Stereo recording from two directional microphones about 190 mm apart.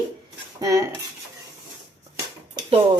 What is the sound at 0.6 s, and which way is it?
Speech, 15° right (ahead or behind).